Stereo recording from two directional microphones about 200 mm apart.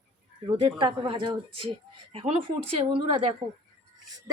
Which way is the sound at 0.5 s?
25° right (ahead or behind).